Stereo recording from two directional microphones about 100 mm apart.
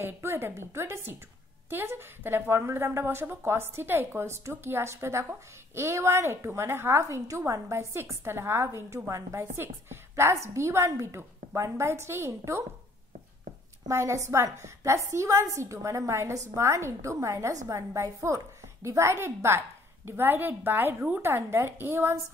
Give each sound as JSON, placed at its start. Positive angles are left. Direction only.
{"t": 0.0, "sound": "a woman's voice", "side_deg": -25}
{"t": 13.8, "sound": "a woman's voice", "side_deg": -30}